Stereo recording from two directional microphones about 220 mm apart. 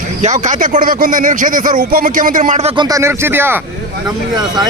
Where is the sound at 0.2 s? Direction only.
35° right (ahead or behind); by 3.6 s 10° right (ahead or behind).